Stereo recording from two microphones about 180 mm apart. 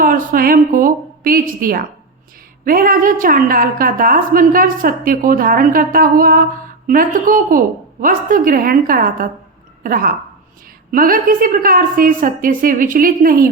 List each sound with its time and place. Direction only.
0.0 s a woman's voice: 50° right (ahead or behind)